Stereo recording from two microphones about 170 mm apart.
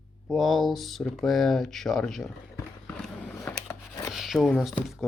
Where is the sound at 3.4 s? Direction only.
15° left (ahead or behind).